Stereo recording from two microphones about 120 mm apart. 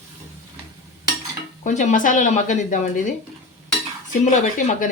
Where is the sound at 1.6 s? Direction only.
90° left.